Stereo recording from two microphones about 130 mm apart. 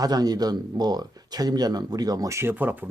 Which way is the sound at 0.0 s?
30° right (ahead or behind).